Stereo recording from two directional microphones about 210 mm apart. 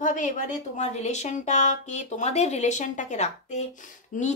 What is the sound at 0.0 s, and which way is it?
Speech, 40° left (ahead or behind).